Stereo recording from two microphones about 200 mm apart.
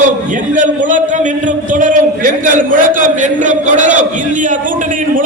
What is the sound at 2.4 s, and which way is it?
A man's voice, 40° right (ahead or behind).